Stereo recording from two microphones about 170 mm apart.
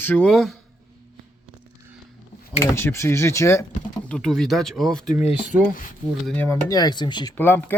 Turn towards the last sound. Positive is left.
turn(degrees=10)  # may be behind; listen again after turning